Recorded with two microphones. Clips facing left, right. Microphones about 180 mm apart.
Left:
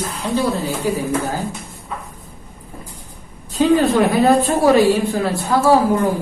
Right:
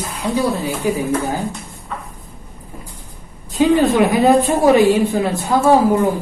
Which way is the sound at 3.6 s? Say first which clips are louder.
Right 1 dB; 15° right (ahead or behind).